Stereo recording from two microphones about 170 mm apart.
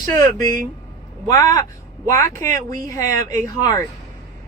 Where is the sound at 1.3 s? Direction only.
20° left (ahead or behind).